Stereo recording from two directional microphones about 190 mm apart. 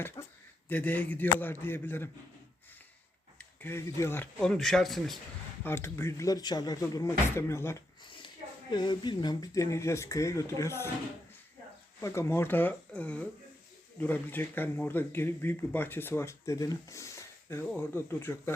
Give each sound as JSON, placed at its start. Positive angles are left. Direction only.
{"t": 0.7, "sound": "speech", "side_deg": 10}
{"t": 3.3, "sound": "speech", "side_deg": 10}
{"t": 5.6, "sound": "speech", "side_deg": 15}
{"t": 8.0, "sound": "a sound", "side_deg": 25}
{"t": 8.7, "sound": "speech", "side_deg": 25}
{"t": 11.9, "sound": "speech", "side_deg": 15}